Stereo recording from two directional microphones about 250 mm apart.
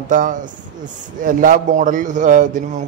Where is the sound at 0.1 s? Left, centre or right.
Right.